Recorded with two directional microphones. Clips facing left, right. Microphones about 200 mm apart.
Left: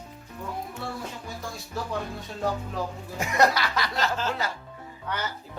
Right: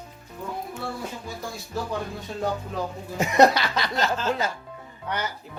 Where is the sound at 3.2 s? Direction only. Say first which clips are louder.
Right 5 dB; 20° right (ahead or behind).